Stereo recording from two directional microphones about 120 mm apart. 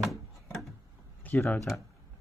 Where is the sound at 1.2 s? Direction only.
15° left (ahead or behind).